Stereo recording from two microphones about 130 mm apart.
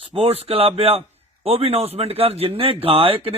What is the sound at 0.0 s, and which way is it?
Speech, 45° right (ahead or behind).